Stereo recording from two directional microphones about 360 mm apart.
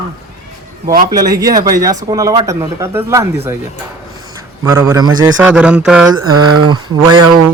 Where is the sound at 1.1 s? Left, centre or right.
Centre.